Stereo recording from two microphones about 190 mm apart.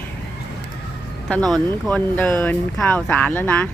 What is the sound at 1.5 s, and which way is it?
Speech, 5° left (ahead or behind).